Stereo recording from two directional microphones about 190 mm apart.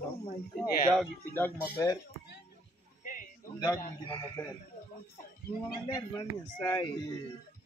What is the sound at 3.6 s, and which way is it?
Speech, 20° left (ahead or behind).